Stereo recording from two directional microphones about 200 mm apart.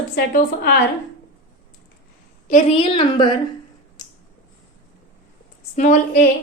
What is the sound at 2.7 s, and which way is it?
Speech, 25° left (ahead or behind).